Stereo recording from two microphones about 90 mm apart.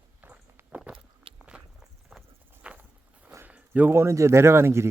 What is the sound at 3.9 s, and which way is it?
Speech, 35° right (ahead or behind).